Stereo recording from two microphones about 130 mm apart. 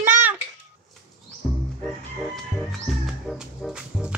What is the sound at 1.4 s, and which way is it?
Music, centre (ahead or behind).